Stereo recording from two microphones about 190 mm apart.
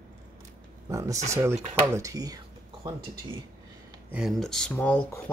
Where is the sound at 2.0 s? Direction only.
20° right (ahead or behind).